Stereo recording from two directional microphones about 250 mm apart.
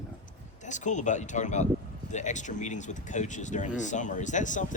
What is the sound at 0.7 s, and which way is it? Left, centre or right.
Speech, left.